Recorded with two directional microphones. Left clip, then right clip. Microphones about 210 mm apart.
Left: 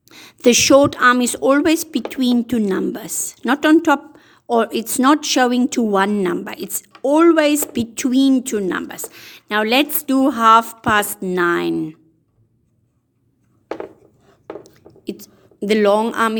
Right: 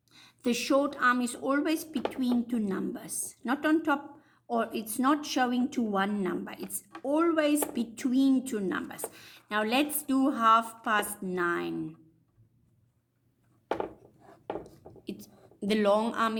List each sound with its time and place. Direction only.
0.1 s a woman's voice: 45° left (ahead or behind)
15.0 s a woman's voice: 40° left (ahead or behind)